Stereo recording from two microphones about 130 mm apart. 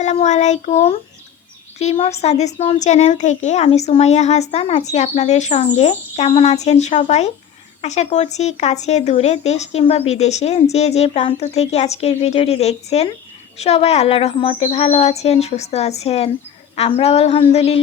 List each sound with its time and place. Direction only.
0.0 s a child's voice: 60° left (ahead or behind)